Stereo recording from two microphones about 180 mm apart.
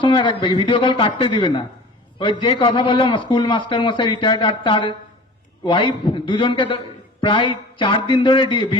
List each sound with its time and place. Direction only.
0.0 s a man's voice: 25° left (ahead or behind)